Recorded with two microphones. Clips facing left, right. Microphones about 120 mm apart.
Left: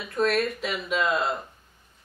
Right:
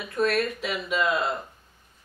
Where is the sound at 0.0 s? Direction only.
Centre (ahead or behind).